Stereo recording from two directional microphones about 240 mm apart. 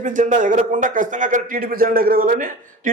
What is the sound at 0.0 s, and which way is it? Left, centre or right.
A man's voice, right.